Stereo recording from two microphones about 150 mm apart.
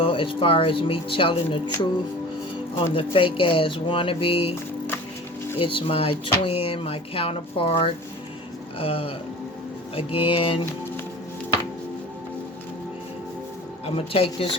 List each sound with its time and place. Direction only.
0.0 s speech: 35° left (ahead or behind)
2.9 s speech: 35° left (ahead or behind)
5.5 s speech: 35° left (ahead or behind)
8.8 s speech: 40° left (ahead or behind)
13.8 s speech: 40° left (ahead or behind)